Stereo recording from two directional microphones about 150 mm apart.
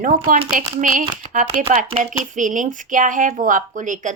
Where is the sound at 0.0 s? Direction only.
70° right (ahead or behind).